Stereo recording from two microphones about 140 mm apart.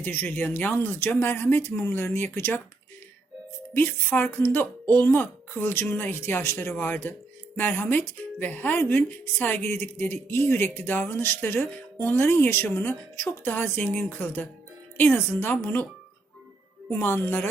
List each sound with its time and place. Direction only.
0.0 s speech: 15° left (ahead or behind)
3.8 s speech: 15° left (ahead or behind)
16.9 s speech: 15° left (ahead or behind)